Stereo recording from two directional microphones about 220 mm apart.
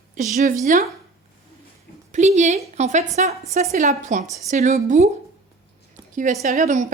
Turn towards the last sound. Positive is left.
turn(degrees=-35)  # may be behind; listen again after turning